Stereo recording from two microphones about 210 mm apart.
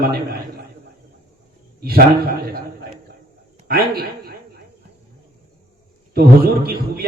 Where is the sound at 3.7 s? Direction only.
45° right (ahead or behind).